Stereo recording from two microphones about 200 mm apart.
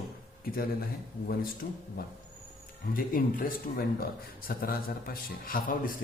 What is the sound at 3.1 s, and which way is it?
A man's voice, 45° left (ahead or behind).